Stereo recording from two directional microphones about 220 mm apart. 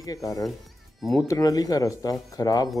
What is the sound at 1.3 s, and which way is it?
Speech, 15° left (ahead or behind).